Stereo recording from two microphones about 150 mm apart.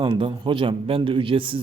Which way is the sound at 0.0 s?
35° right (ahead or behind).